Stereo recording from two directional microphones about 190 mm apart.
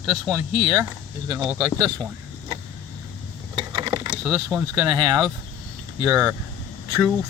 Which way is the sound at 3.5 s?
25° right (ahead or behind).